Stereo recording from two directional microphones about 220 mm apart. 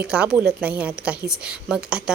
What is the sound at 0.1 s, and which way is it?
A woman's voice, 5° right (ahead or behind).